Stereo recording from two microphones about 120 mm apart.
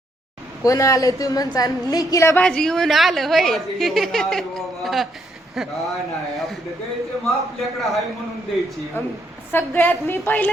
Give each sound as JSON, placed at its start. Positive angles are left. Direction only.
{"t": 0.6, "sound": "speech", "side_deg": 30}
{"t": 2.4, "sound": "a woman's voice", "side_deg": 5}
{"t": 9.0, "sound": "a woman's voice", "side_deg": 20}